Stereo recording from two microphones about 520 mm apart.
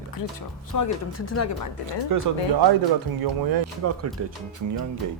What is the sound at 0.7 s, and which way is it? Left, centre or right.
Speech, left.